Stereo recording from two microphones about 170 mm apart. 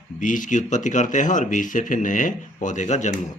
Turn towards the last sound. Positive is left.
turn(degrees=45)  # may be behind; listen again after turning